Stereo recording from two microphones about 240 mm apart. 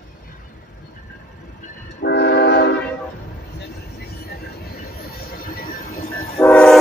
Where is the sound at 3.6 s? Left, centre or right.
Left.